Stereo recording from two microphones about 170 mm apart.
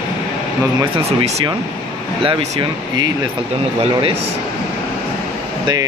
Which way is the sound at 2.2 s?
30° right (ahead or behind).